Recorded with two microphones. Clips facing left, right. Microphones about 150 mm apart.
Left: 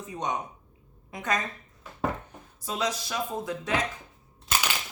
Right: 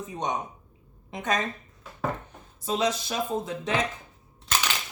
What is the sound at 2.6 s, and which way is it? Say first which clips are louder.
Speech: right 4 dB; 25° right (ahead or behind).